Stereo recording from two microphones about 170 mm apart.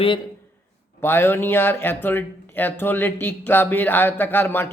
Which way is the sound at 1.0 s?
15° left (ahead or behind).